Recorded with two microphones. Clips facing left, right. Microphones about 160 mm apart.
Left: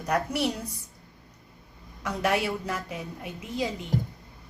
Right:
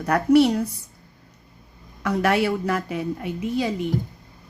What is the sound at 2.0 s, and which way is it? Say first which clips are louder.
Speech: right 6 dB; 65° right (ahead or behind).